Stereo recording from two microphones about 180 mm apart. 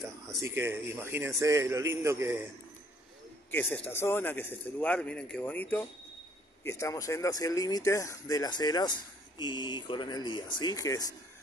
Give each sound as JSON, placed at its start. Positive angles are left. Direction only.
{"t": 0.4, "sound": "a man's voice", "side_deg": -15}
{"t": 3.5, "sound": "speech", "side_deg": 10}